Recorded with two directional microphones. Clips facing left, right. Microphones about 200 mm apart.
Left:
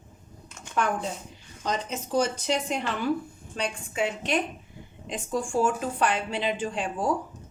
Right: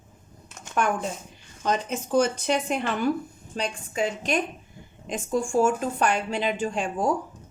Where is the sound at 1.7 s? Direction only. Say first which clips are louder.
Right 4 dB; 55° right (ahead or behind).